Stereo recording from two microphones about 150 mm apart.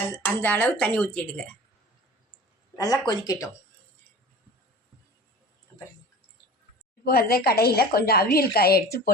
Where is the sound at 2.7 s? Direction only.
25° left (ahead or behind).